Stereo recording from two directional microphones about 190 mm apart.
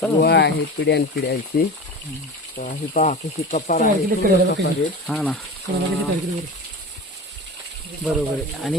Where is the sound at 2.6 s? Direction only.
40° left (ahead or behind).